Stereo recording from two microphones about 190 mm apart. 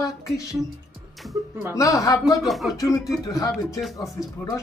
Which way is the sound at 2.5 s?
Centre (ahead or behind).